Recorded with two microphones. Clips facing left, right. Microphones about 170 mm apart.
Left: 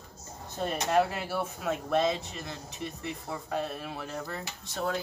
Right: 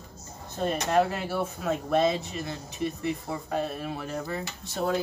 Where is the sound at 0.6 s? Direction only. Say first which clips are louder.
Right 2 dB; 5° left (ahead or behind).